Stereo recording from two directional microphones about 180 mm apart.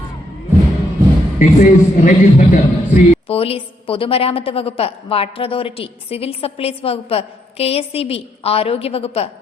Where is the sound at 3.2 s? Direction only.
30° left (ahead or behind).